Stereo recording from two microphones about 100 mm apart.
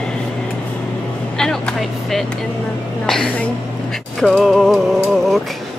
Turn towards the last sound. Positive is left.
turn(degrees=0)  # may be behind; listen again after turning